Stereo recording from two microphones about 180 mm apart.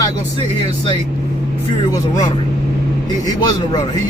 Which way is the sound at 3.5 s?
20° left (ahead or behind).